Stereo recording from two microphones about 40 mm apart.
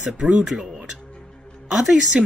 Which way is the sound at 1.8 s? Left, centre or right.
Centre.